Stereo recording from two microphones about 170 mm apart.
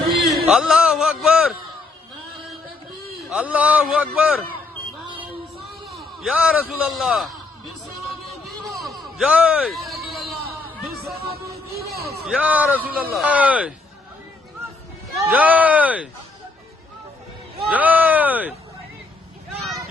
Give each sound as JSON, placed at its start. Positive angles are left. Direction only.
{"t": 0.4, "sound": "music", "side_deg": -5}
{"t": 3.2, "sound": "speech", "side_deg": -5}
{"t": 6.0, "sound": "a man's voice", "side_deg": -5}
{"t": 8.8, "sound": "a sound", "side_deg": 0}
{"t": 11.7, "sound": "a sound", "side_deg": -65}
{"t": 12.2, "sound": "speech", "side_deg": -5}
{"t": 15.1, "sound": "speech", "side_deg": -10}
{"t": 17.7, "sound": "speech", "side_deg": -10}